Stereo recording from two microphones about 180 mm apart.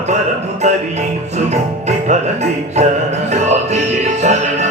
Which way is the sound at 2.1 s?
40° right (ahead or behind).